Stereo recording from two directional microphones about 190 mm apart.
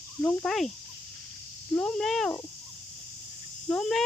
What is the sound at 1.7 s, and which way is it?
Speech, 5° left (ahead or behind).